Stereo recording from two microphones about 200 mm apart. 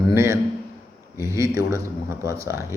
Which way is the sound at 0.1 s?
15° right (ahead or behind).